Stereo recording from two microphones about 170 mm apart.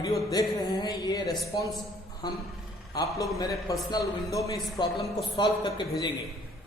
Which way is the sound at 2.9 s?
20° left (ahead or behind).